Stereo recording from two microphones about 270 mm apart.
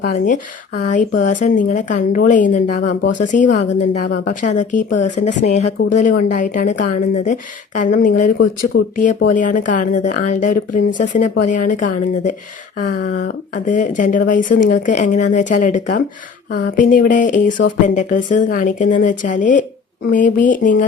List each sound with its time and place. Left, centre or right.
0.8 s speech: left